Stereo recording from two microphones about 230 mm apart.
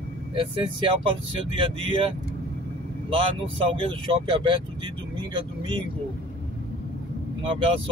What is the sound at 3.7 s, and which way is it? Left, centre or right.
Speech, right.